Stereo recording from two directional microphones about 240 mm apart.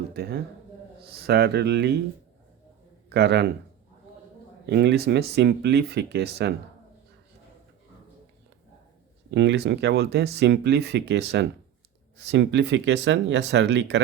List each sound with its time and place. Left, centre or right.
0.1 s speech: right
3.1 s speech: right
4.6 s speech: right
9.3 s speech: right